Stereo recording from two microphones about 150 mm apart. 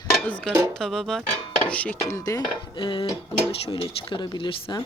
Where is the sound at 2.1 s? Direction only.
20° left (ahead or behind).